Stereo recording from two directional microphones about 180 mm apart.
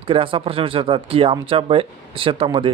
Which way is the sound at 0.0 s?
30° right (ahead or behind).